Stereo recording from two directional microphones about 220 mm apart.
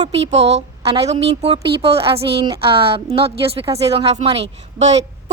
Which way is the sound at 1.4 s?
25° right (ahead or behind).